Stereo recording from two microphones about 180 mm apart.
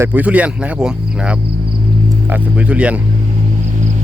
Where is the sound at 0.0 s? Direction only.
10° right (ahead or behind).